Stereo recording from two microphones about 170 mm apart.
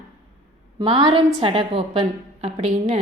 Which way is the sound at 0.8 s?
25° right (ahead or behind).